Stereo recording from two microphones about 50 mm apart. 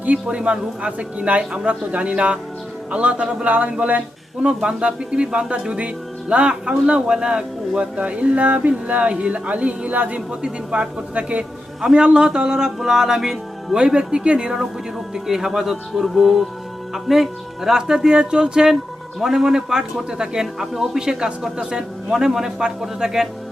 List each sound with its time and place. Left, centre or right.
0.0 s speech: right
11.8 s a man's voice: centre
13.7 s a man's voice: centre